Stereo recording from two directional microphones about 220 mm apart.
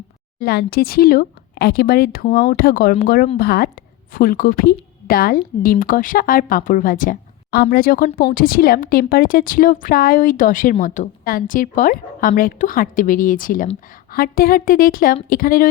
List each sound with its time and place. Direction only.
0.3 s a woman's voice: 45° left (ahead or behind)